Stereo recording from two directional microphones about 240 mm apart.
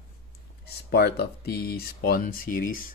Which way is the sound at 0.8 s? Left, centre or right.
Left.